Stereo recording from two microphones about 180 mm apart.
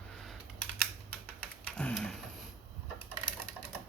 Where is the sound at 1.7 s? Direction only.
5° left (ahead or behind).